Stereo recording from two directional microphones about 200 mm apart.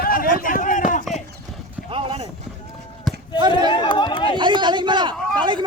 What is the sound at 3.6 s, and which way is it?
Speech, 25° left (ahead or behind).